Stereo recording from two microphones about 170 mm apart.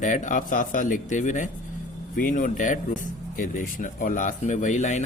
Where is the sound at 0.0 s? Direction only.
45° left (ahead or behind).